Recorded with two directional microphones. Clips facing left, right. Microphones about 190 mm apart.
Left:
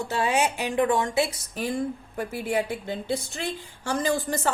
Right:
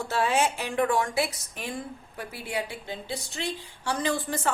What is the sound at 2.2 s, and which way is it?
A woman's voice, 50° left (ahead or behind).